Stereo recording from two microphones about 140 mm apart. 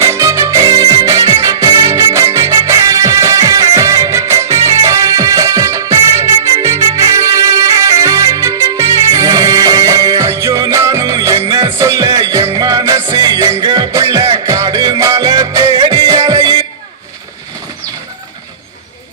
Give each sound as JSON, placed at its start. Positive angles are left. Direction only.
{"t": 0.0, "sound": "music", "side_deg": -20}